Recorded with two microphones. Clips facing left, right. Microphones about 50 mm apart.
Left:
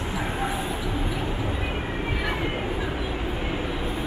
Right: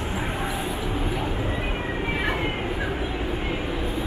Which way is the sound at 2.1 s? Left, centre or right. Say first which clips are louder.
Right 2 dB; centre.